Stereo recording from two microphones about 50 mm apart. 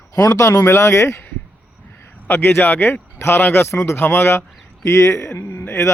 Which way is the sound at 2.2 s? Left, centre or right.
Left.